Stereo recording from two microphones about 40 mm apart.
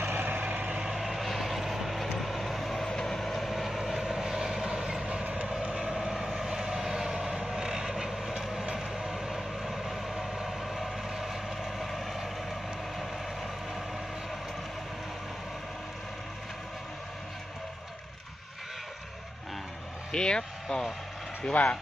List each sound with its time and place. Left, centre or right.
0.0 s vehicle: right
0.3 s vehicle: right
0.9 s vehicle: centre
3.3 s vehicle: centre; by 5.5 s right
5.8 s vehicle: centre
20.1 s speech: left
21.5 s speech: left